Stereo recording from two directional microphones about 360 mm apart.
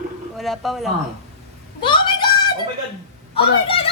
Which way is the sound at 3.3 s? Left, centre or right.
Centre.